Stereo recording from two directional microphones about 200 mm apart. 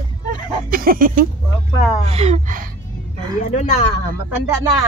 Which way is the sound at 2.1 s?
30° right (ahead or behind).